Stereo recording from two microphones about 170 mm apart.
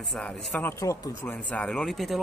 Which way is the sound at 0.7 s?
20° left (ahead or behind).